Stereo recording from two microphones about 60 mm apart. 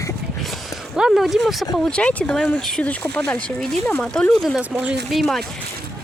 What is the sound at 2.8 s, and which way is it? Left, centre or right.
Speech, left.